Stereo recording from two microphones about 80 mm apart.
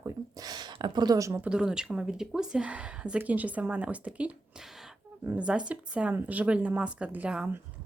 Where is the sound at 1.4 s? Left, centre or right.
Centre.